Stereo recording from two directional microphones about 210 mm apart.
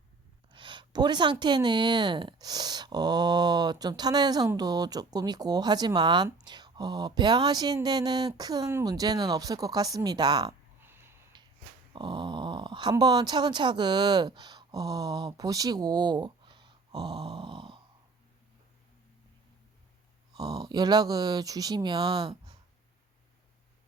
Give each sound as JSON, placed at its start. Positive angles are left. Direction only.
{"t": 0.5, "sound": "speech", "side_deg": -20}
{"t": 10.8, "sound": "a sound", "side_deg": -10}
{"t": 11.9, "sound": "speech", "side_deg": -20}
{"t": 20.3, "sound": "speech", "side_deg": -20}